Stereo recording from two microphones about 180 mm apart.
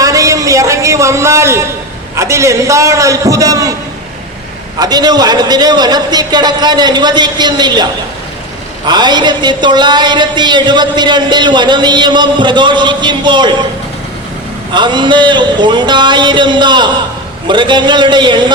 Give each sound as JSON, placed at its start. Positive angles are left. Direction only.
{"t": 0.0, "sound": "a sound", "side_deg": -20}
{"t": 2.1, "sound": "a man's voice", "side_deg": -15}
{"t": 4.8, "sound": "a man's voice", "side_deg": -20}
{"t": 8.9, "sound": "a man's voice", "side_deg": -25}
{"t": 14.7, "sound": "a man's voice", "side_deg": -25}